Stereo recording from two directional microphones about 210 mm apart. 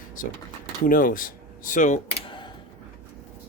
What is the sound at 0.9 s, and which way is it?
Speech, 40° left (ahead or behind).